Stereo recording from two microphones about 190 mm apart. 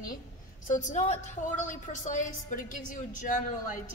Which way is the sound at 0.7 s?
40° left (ahead or behind).